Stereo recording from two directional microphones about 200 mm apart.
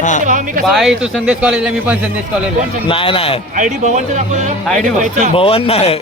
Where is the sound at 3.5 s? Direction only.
40° right (ahead or behind).